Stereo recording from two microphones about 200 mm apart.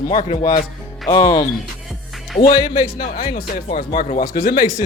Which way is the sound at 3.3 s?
40° left (ahead or behind).